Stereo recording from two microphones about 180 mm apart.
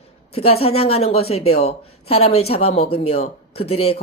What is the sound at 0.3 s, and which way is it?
A woman's voice, 35° left (ahead or behind).